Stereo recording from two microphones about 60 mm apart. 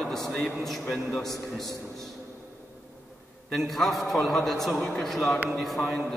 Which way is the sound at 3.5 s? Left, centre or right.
Centre.